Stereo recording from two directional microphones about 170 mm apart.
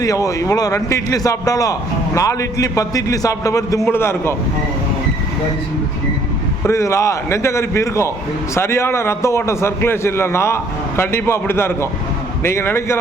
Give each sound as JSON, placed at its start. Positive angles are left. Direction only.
{"t": 0.0, "sound": "a man's voice", "side_deg": 20}
{"t": 6.7, "sound": "a man's voice", "side_deg": 15}